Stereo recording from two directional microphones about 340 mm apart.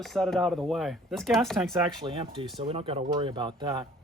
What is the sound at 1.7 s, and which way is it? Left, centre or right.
Speech, centre.